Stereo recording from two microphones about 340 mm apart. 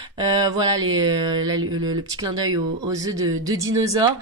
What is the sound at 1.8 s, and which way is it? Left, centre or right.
A woman's voice, centre.